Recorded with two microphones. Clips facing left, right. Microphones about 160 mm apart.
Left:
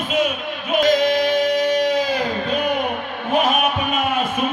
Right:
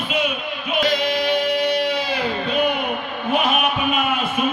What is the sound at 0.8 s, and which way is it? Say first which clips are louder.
Singing: left 5 dB; 45° left (ahead or behind).